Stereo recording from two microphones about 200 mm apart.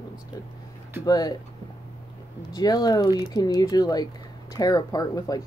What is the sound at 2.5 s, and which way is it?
Speech, 20° left (ahead or behind).